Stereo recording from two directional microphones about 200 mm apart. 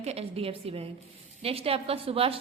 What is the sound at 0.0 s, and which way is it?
A woman's voice, 30° right (ahead or behind).